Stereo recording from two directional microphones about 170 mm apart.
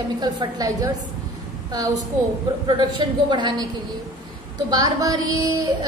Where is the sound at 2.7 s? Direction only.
25° right (ahead or behind).